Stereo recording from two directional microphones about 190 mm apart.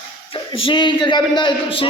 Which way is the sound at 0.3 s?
30° left (ahead or behind).